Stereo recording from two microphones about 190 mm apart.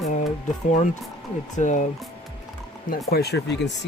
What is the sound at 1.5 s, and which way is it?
Speech, 40° left (ahead or behind).